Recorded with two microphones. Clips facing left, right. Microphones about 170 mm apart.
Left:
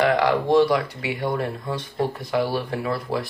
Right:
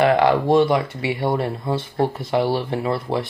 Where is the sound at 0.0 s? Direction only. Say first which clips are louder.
Right 3 dB; 30° right (ahead or behind).